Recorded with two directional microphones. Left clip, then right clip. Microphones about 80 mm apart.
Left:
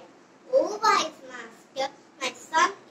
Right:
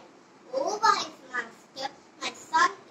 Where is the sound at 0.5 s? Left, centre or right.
Right.